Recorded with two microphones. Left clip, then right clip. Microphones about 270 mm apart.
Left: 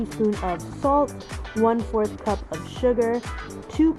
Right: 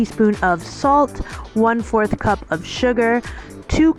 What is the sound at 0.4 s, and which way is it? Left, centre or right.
Speech, right.